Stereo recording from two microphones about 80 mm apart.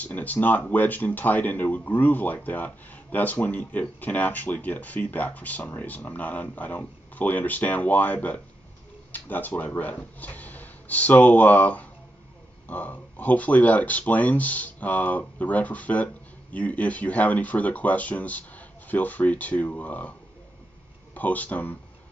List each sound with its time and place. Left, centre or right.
0.0 s speech: centre